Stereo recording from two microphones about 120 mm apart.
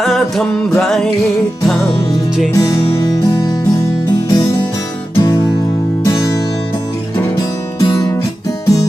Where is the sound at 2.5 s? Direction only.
30° left (ahead or behind).